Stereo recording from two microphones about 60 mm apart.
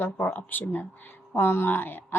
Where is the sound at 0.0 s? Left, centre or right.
Left.